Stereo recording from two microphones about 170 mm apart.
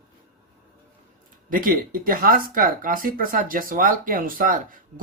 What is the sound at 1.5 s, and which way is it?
Speech, 55° right (ahead or behind).